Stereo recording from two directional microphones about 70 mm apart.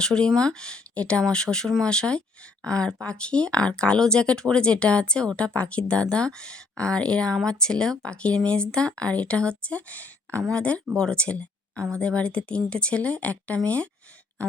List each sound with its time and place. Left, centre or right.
0.0 s speech: centre